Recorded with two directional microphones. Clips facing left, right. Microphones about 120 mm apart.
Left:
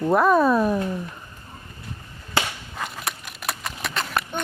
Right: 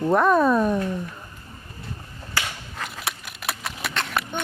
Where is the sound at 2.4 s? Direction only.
25° left (ahead or behind).